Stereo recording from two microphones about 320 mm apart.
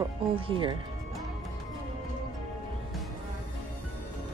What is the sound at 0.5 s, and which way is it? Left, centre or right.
Speech, centre.